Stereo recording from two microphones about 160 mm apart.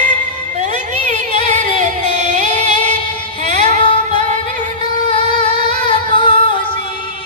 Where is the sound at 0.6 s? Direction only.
45° right (ahead or behind).